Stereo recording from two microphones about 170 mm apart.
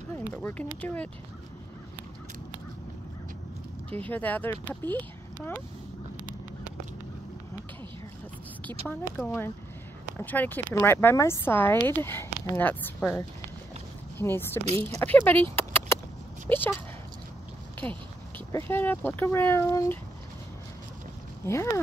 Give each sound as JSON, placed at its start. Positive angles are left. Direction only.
{"t": 0.3, "sound": "speech", "side_deg": 10}
{"t": 3.9, "sound": "speech", "side_deg": 10}
{"t": 8.8, "sound": "speech", "side_deg": 10}
{"t": 14.6, "sound": "speech", "side_deg": -40}
{"t": 15.0, "sound": "speech", "side_deg": 10}
{"t": 15.5, "sound": "a sound", "side_deg": 15}
{"t": 16.4, "sound": "speech", "side_deg": 10}
{"t": 18.5, "sound": "speech", "side_deg": 15}
{"t": 21.4, "sound": "speech", "side_deg": 15}